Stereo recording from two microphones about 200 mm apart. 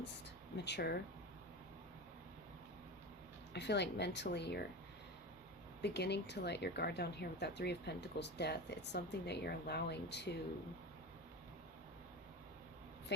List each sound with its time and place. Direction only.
0.5 s speech: 60° left (ahead or behind)
3.5 s speech: 60° left (ahead or behind)
5.8 s speech: 55° left (ahead or behind)
13.1 s speech: 60° left (ahead or behind)